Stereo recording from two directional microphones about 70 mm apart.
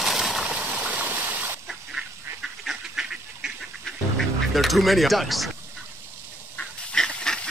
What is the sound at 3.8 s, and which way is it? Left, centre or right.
Music, centre.